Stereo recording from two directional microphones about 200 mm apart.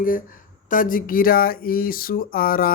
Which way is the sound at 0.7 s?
45° left (ahead or behind).